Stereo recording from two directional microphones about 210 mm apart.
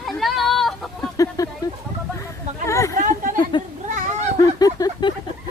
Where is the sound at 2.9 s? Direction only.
35° right (ahead or behind).